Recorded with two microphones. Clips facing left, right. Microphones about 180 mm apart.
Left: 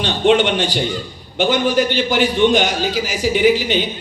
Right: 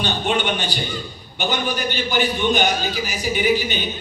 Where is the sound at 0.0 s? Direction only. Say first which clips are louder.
Left 7 dB; 90° left.